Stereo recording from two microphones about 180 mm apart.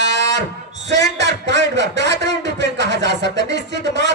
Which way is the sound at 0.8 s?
75° right (ahead or behind).